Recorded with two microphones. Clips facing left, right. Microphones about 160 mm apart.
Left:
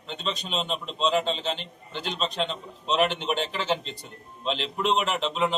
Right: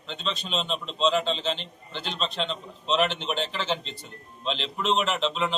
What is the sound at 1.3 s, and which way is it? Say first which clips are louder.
Speech: right 1 dB; 50° left (ahead or behind).